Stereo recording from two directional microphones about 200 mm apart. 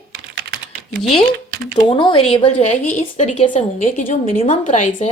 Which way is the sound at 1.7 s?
25° left (ahead or behind).